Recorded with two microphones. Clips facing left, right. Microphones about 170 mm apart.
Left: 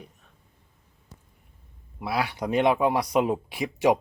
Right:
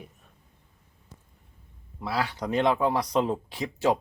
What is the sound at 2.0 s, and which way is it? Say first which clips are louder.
Speech: left 2 dB; 10° left (ahead or behind).